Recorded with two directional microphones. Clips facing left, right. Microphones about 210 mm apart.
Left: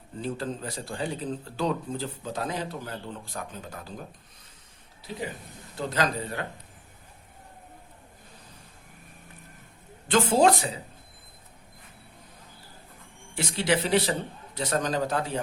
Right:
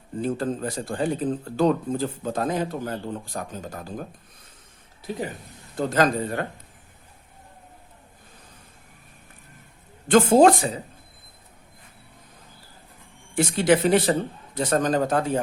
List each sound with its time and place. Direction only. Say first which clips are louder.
0.2 s speech: right 6 dB; 50° right (ahead or behind)
5.1 s speech: right 4 dB; 45° right (ahead or behind)
10.1 s speech: right 6 dB; 50° right (ahead or behind)
13.3 s speech: right 7 dB; 50° right (ahead or behind)